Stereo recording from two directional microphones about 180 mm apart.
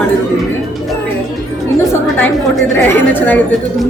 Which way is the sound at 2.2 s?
10° left (ahead or behind).